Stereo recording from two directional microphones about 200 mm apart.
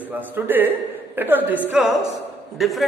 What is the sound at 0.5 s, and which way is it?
A man's voice, 10° right (ahead or behind).